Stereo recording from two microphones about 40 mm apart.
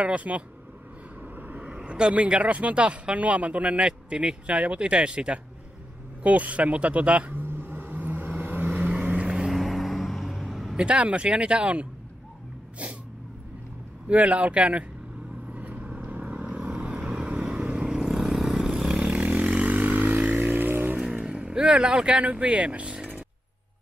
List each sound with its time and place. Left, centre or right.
0.0 s speech: right
1.2 s vehicle: right
1.9 s speech: right
7.4 s vehicle: right
7.9 s vehicle: right
8.8 s vehicle: right
9.1 s vehicle: right
9.5 s vehicle: centre
10.8 s speech: right
14.0 s speech: right
15.5 s vehicle: right; by 19.1 s centre
19.1 s vehicle: right
21.2 s vehicle: right
21.6 s speech: right